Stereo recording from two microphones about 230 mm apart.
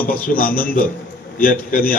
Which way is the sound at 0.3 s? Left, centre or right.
Left.